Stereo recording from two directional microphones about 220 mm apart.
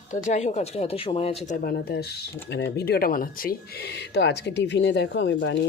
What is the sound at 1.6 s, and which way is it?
Speech, 45° left (ahead or behind).